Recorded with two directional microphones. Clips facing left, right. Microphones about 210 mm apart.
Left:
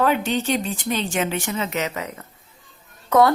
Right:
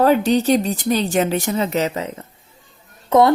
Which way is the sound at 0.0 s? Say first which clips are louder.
Right 6 dB; 35° right (ahead or behind).